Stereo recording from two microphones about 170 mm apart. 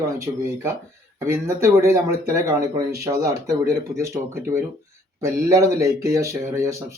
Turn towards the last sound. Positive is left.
turn(degrees=-15)  # may be behind; listen again after turning